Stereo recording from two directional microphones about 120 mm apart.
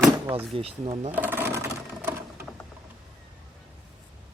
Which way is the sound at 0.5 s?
55° right (ahead or behind).